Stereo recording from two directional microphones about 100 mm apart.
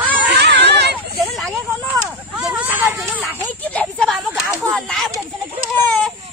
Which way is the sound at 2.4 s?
15° right (ahead or behind).